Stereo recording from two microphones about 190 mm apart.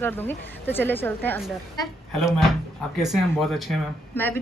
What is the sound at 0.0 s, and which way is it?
Speech, 10° left (ahead or behind).